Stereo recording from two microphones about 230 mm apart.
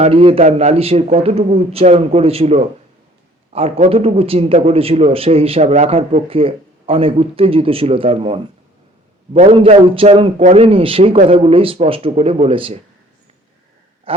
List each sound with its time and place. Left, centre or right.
0.0 s a man's voice: right